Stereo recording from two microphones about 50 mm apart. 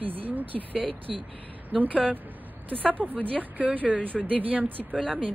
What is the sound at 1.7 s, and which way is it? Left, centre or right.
Speech, right.